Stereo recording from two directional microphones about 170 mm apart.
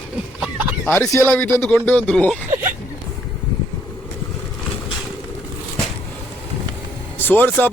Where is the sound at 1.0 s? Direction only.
15° left (ahead or behind).